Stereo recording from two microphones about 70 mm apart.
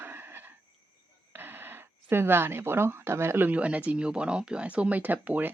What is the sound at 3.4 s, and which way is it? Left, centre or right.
Speech, centre.